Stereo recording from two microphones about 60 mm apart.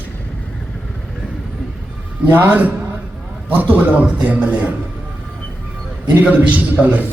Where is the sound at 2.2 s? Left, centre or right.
Right.